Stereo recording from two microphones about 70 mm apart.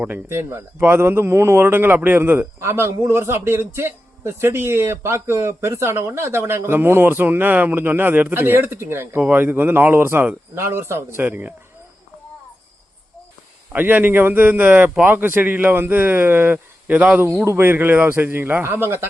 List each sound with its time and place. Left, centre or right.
0.0 s a man's voice: right
11.3 s a man's voice: right
13.7 s a man's voice: right
17.4 s a man's voice: right